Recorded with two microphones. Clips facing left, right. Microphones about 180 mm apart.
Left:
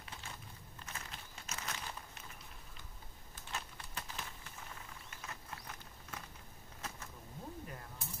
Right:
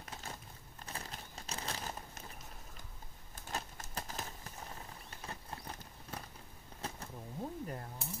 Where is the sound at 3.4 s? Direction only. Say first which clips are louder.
Right 4 dB; 45° right (ahead or behind).